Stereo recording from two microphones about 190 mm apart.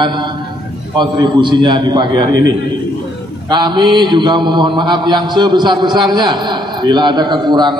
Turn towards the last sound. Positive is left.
turn(degrees=-25)  # may be behind; listen again after turning